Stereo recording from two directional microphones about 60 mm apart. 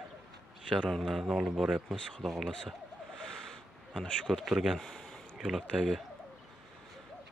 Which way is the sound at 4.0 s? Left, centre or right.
Centre.